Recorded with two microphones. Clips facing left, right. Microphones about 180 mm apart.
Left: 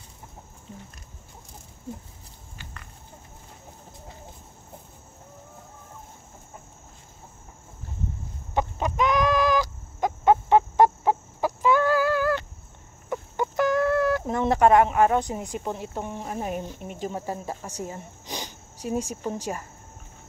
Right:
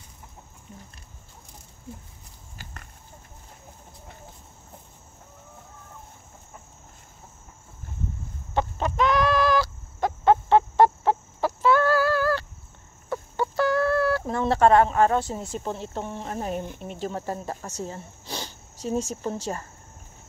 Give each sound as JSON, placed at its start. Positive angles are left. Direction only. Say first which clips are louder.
{"t": 2.5, "sound": "a sound", "louder": "right 1 dB", "side_deg": -40}
{"t": 8.5, "sound": "chicken", "louder": "even", "side_deg": 15}
{"t": 16.8, "sound": "speech", "louder": "right 1 dB", "side_deg": 10}